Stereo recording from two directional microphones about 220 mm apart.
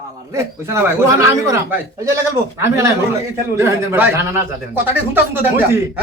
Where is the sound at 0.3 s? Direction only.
10° right (ahead or behind).